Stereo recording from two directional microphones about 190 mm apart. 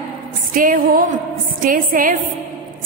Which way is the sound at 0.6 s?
45° right (ahead or behind).